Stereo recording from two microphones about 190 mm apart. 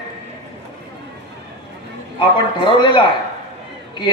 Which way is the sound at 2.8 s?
25° left (ahead or behind).